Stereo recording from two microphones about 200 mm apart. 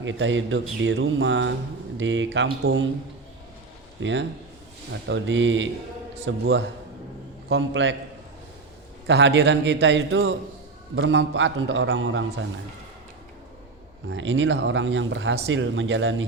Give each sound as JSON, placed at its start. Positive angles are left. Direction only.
{"t": 0.0, "sound": "a man's voice", "side_deg": -70}
{"t": 4.0, "sound": "speech", "side_deg": -65}
{"t": 9.0, "sound": "a man's voice", "side_deg": -60}
{"t": 14.1, "sound": "a man's voice", "side_deg": -65}